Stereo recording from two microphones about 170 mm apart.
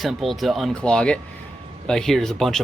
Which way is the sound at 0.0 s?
Centre (ahead or behind).